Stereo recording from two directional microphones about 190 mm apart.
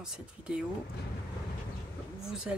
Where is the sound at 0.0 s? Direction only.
5° right (ahead or behind).